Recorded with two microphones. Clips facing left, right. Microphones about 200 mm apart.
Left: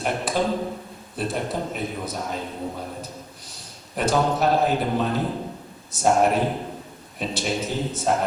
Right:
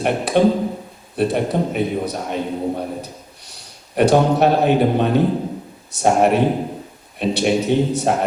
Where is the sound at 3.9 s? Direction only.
65° right (ahead or behind).